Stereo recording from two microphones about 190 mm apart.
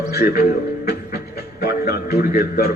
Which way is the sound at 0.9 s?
55° left (ahead or behind).